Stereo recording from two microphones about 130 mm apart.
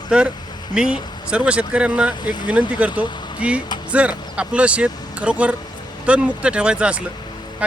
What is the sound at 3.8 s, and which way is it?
Speech, 10° right (ahead or behind).